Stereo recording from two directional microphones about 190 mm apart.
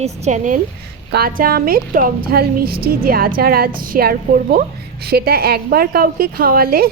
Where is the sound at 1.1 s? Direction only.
55° right (ahead or behind).